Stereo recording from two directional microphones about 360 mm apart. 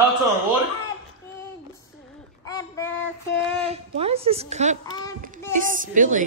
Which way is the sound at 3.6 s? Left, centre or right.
Centre.